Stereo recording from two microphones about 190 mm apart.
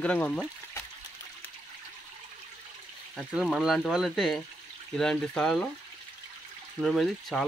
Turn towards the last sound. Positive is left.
turn(degrees=0)  # may be behind; listen again after turning